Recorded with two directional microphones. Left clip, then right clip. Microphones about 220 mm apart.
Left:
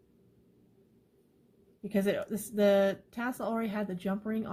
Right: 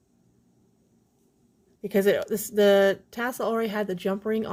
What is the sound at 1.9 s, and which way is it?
Speech, 45° right (ahead or behind).